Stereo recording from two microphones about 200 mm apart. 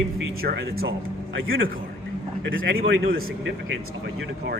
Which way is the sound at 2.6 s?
45° right (ahead or behind).